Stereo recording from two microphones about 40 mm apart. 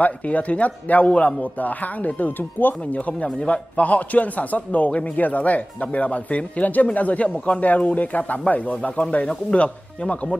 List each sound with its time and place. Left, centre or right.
0.0 s a man's voice: left